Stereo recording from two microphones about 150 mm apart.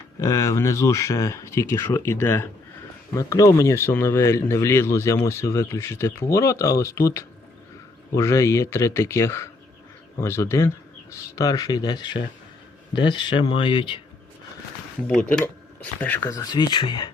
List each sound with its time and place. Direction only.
0.2 s speech: 20° left (ahead or behind)
15.0 s speech: 10° left (ahead or behind)
16.4 s speech: 30° left (ahead or behind)